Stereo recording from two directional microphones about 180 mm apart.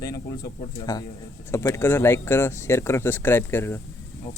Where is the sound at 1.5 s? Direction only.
15° left (ahead or behind).